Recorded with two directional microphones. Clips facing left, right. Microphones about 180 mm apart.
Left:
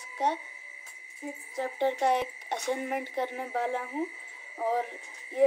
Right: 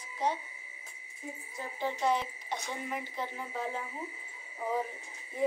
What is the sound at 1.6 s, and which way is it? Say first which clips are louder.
Speech: left 6 dB; 65° left (ahead or behind).